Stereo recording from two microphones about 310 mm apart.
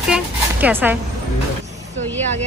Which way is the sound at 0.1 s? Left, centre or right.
Centre.